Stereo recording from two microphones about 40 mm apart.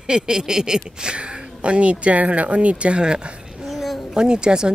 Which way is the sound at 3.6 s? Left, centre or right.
Centre.